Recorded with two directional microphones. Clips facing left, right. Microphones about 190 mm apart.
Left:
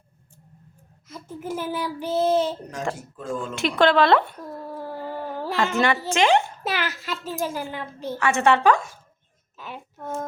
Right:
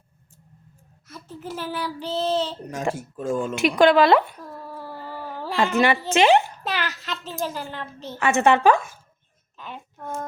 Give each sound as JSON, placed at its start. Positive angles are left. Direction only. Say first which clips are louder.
{"t": 1.0, "sound": "a child's voice", "louder": "left 3 dB", "side_deg": 10}
{"t": 2.7, "sound": "speech", "louder": "right 3 dB", "side_deg": -10}
{"t": 4.7, "sound": "cat", "louder": "left 5 dB", "side_deg": 15}
{"t": 5.5, "sound": "speech", "louder": "right 2 dB", "side_deg": -15}
{"t": 6.7, "sound": "a child's voice", "louder": "left 1 dB", "side_deg": 10}
{"t": 8.2, "sound": "a woman's voice", "louder": "right 2 dB", "side_deg": -20}
{"t": 9.6, "sound": "a sound", "louder": "even", "side_deg": 10}